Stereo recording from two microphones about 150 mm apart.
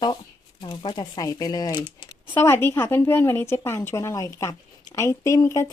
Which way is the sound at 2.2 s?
15° left (ahead or behind).